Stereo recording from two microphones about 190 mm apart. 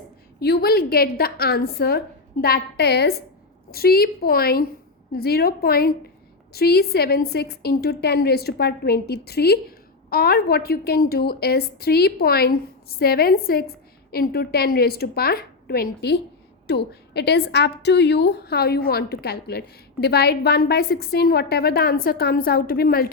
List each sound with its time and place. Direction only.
0.3 s a woman's voice: 55° left (ahead or behind)